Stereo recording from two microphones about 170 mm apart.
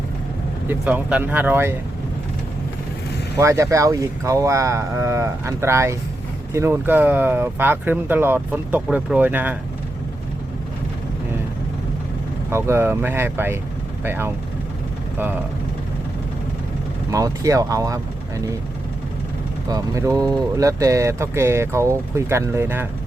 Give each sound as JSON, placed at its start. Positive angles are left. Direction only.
{"t": 0.7, "sound": "speech", "side_deg": -10}
{"t": 3.3, "sound": "speech", "side_deg": -15}
{"t": 12.5, "sound": "speech", "side_deg": -15}
{"t": 17.1, "sound": "speech", "side_deg": -20}
{"t": 19.6, "sound": "speech", "side_deg": -20}